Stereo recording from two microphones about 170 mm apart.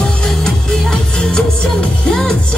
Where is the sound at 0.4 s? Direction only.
5° left (ahead or behind).